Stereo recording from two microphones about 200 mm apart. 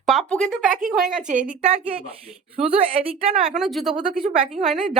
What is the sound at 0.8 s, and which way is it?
Speech, centre (ahead or behind).